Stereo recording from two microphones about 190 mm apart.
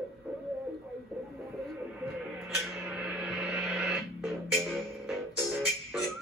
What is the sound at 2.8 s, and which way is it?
Gong, 5° right (ahead or behind).